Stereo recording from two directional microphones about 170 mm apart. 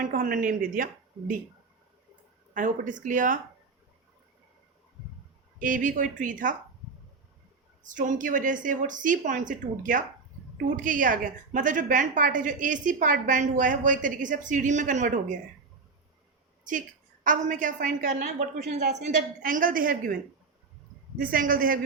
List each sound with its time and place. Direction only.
0.0 s a woman's voice: 55° right (ahead or behind)
2.5 s a woman's voice: 50° right (ahead or behind)
5.5 s a woman's voice: 50° right (ahead or behind)
7.9 s a woman's voice: 50° right (ahead or behind)
17.2 s a woman's voice: 50° right (ahead or behind)
19.4 s a woman's voice: 55° right (ahead or behind)
21.2 s a woman's voice: 55° right (ahead or behind)